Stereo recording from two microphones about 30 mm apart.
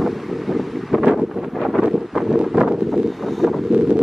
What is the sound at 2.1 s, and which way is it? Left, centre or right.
Wind noise, centre.